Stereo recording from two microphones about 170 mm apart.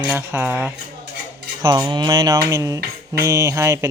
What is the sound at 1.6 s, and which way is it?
Mantra, 25° right (ahead or behind).